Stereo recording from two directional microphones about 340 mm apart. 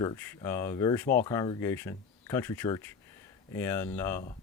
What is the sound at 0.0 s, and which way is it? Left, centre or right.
Speech, centre.